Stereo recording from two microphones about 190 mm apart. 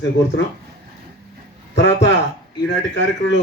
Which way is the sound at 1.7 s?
65° left (ahead or behind).